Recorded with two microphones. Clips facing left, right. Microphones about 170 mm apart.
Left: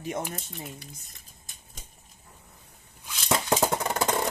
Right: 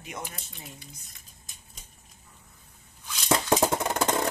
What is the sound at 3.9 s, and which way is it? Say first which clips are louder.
Percussion: right 1 dB; centre (ahead or behind).